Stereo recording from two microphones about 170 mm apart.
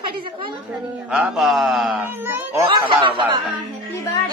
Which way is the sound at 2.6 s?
30° right (ahead or behind).